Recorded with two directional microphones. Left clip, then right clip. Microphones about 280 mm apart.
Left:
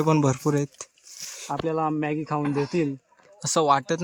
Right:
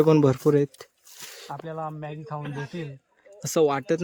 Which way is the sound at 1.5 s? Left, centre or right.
Left.